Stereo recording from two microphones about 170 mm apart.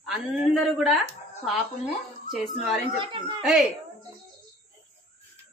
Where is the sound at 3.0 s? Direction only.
30° right (ahead or behind).